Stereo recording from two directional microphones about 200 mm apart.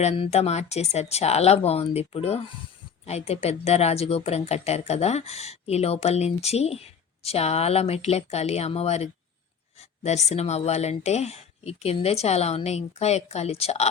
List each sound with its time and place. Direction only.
0.0 s speech: 30° left (ahead or behind)
10.2 s speech: 35° left (ahead or behind)